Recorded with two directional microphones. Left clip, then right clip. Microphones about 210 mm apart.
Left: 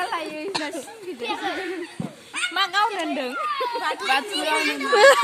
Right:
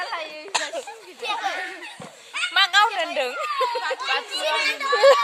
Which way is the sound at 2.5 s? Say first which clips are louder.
Right 4 dB; 40° right (ahead or behind).